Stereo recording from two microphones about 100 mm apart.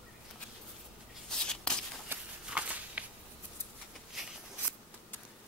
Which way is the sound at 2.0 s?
15° right (ahead or behind).